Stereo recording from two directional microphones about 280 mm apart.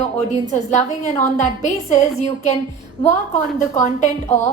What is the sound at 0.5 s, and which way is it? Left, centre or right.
A woman's voice, left.